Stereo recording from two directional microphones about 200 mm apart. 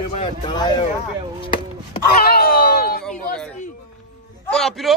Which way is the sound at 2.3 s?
50° left (ahead or behind).